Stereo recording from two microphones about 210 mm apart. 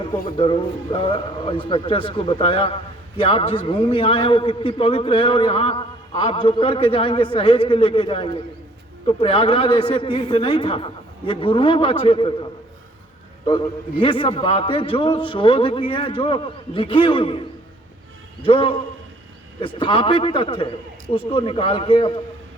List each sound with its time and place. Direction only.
0.3 s a man's voice: 25° left (ahead or behind)
18.4 s a man's voice: 25° left (ahead or behind)